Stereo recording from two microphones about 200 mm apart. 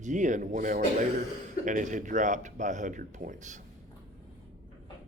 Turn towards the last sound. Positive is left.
turn(degrees=-40)  # may be behind; listen again after turning